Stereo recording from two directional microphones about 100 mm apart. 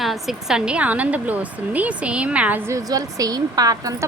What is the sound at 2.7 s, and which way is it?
A woman's voice, 35° right (ahead or behind).